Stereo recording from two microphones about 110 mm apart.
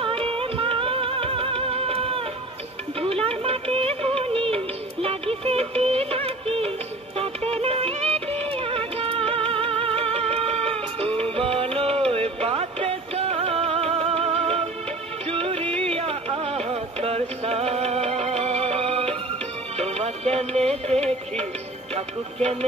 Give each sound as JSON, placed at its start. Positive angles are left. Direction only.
{"t": 0.0, "sound": "music", "side_deg": -55}